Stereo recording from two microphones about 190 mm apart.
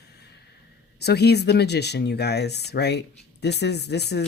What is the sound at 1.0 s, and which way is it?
Speech, 60° left (ahead or behind).